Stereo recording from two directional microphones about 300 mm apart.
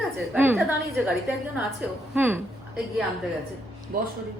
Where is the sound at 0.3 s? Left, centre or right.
Centre.